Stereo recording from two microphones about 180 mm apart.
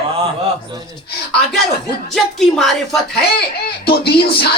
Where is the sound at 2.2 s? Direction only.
Centre (ahead or behind).